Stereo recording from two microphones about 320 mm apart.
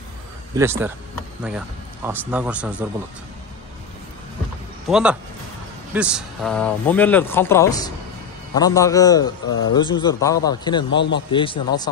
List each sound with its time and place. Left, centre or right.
0.6 s speech: centre
2.0 s speech: centre
4.8 s a man's voice: centre
10.9 s speech: left
11.3 s a man's voice: centre